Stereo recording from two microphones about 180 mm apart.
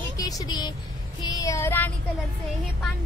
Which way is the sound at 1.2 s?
20° left (ahead or behind).